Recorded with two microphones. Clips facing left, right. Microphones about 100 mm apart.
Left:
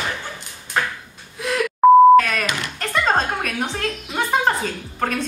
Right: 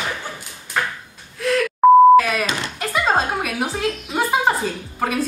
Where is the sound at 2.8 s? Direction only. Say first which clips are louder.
Even; 5° right (ahead or behind).